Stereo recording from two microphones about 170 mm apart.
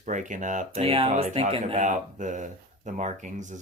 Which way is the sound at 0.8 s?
35° right (ahead or behind).